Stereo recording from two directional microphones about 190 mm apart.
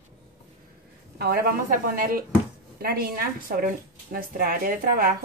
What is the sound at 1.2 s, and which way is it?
Speech, 55° right (ahead or behind).